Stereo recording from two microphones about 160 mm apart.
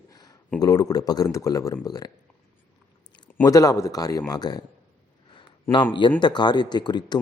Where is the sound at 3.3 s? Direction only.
20° left (ahead or behind).